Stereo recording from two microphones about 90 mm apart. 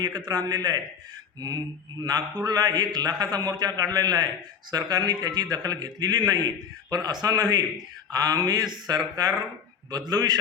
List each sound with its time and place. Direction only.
0.0 s a man's voice: 50° right (ahead or behind)